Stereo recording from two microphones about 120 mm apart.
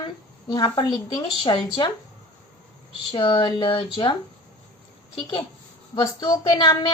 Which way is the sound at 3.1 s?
45° left (ahead or behind).